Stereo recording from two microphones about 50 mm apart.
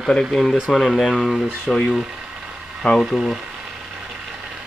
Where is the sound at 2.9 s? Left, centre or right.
Centre.